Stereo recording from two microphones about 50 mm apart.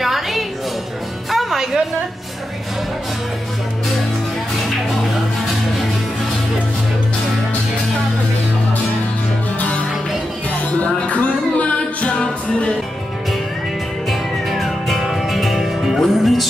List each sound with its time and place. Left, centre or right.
0.0 s music: centre
9.6 s music: left
14.0 s music: centre